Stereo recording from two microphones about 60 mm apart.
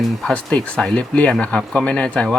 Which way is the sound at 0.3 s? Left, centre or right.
Centre.